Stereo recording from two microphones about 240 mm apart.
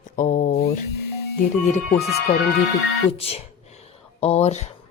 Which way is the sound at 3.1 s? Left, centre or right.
Left.